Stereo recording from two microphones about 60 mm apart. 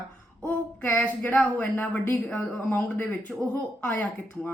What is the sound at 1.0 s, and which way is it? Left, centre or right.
A woman's voice, left.